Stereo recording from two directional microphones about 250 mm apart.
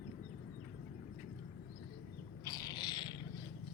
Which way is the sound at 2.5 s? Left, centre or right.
Centre.